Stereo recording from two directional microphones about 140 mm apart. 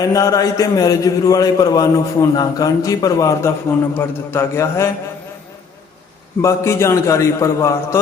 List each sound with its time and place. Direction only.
0.0 s a man's voice: 25° left (ahead or behind)
6.4 s a man's voice: 20° left (ahead or behind)